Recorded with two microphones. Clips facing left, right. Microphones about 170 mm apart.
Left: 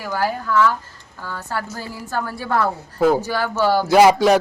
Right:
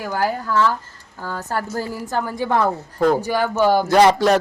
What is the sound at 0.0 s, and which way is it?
Speech, 15° right (ahead or behind).